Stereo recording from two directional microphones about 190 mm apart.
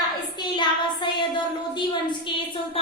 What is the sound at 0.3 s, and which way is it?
Child singing, 25° left (ahead or behind).